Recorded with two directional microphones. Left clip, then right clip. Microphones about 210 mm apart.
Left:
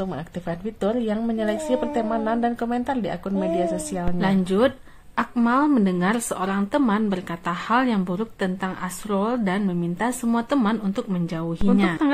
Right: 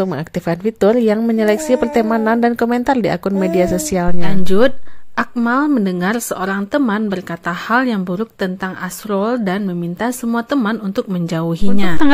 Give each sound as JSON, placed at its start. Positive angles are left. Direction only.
{"t": 0.0, "sound": "speech", "side_deg": -40}